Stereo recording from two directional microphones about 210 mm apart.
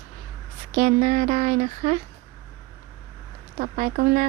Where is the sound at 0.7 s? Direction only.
35° right (ahead or behind).